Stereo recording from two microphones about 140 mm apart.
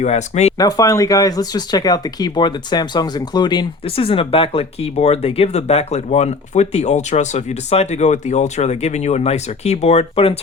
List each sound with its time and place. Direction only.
0.0 s speech: 55° left (ahead or behind)
0.6 s speech: 25° left (ahead or behind); by 10.3 s 45° left (ahead or behind)